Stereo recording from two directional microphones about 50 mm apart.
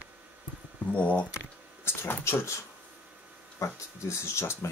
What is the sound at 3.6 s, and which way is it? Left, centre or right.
Speech, left.